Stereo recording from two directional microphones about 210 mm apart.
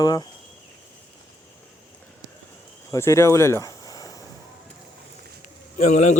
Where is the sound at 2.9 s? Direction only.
15° left (ahead or behind).